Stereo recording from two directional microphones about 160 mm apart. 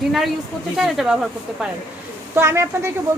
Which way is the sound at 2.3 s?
15° right (ahead or behind).